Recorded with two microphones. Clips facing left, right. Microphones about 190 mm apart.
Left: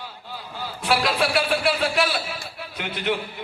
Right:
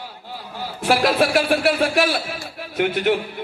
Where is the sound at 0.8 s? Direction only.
50° right (ahead or behind).